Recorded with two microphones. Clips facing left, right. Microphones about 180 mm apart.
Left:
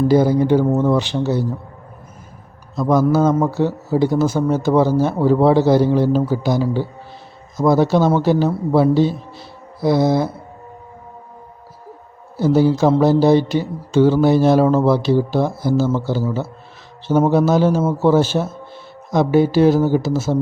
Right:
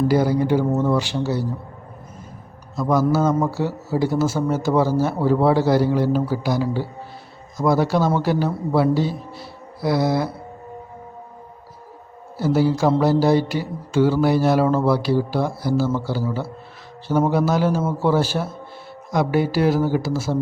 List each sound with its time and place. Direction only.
0.1 s speech: 20° left (ahead or behind)
2.7 s a man's voice: 20° left (ahead or behind)
3.2 s speech: centre (ahead or behind)
3.5 s speech: 20° left (ahead or behind)
12.4 s speech: 20° left (ahead or behind)